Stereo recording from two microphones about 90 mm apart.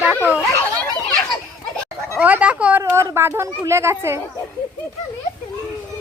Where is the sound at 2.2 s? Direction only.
15° right (ahead or behind).